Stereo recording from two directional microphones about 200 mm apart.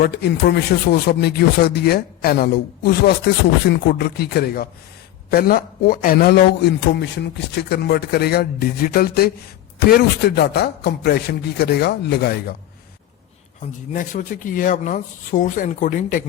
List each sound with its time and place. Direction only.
0.0 s speech: 55° left (ahead or behind)
13.6 s speech: 40° left (ahead or behind)